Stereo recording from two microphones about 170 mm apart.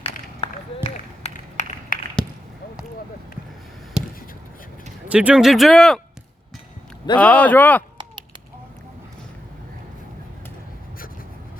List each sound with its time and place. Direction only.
0.4 s run: 35° left (ahead or behind)
1.9 s a sound: 55° left (ahead or behind)
4.0 s basketball bounce: 5° right (ahead or behind)
5.0 s speech: 10° right (ahead or behind)
7.2 s speech: 5° left (ahead or behind)